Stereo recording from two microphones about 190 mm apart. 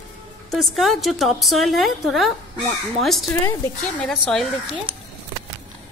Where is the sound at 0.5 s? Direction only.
Centre (ahead or behind).